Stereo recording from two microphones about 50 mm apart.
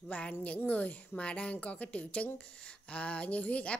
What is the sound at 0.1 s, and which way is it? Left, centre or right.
A woman's voice, left.